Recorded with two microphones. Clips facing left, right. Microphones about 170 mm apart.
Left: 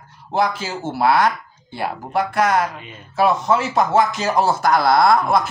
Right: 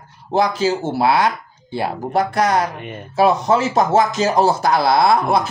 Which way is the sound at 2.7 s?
60° right (ahead or behind).